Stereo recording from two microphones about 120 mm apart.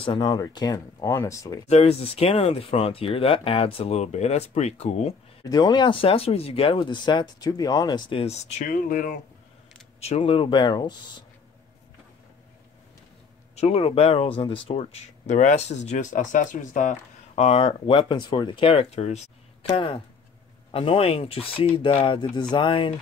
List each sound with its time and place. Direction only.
0.0 s speech: 40° left (ahead or behind); by 1.6 s 25° left (ahead or behind)
1.7 s speech: 60° left (ahead or behind)
5.4 s speech: 35° left (ahead or behind)
8.1 s speech: 55° left (ahead or behind); by 9.2 s 90° left
9.9 s speech: 60° left (ahead or behind); by 11.2 s 35° left (ahead or behind)
13.6 s speech: 60° left (ahead or behind)
15.2 s speech: 85° left
17.4 s speech: 60° left (ahead or behind)
19.7 s speech: 45° left (ahead or behind)